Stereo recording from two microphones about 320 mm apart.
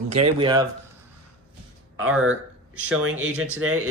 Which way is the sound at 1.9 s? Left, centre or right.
Right.